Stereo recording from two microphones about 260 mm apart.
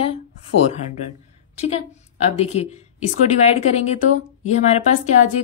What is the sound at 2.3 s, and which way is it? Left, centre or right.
Speech, left.